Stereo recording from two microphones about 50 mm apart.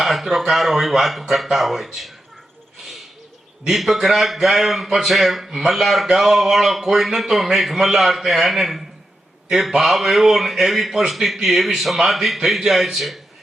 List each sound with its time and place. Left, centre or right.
0.0 s speech: centre
3.7 s speech: centre